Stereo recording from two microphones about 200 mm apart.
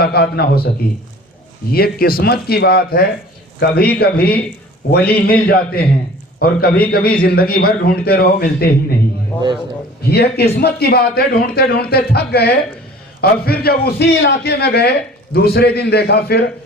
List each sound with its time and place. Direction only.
0.0 s a man's voice: 50° left (ahead or behind)
1.7 s a man's voice: 50° left (ahead or behind)
9.3 s a sound: 10° left (ahead or behind)
10.0 s a man's voice: 50° left (ahead or behind)